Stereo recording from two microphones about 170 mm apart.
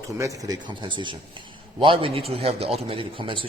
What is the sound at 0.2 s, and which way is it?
A man's voice, 20° right (ahead or behind).